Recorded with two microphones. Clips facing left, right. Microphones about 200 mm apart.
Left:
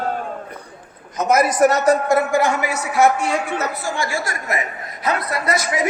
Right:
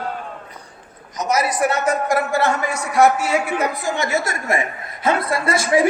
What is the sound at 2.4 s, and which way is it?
A man's voice, 10° left (ahead or behind).